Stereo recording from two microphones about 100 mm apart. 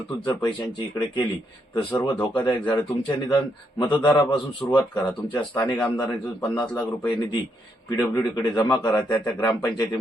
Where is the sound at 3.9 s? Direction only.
50° left (ahead or behind).